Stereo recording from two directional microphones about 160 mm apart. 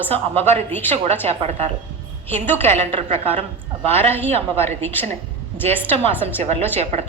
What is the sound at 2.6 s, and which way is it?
Speech, 40° right (ahead or behind).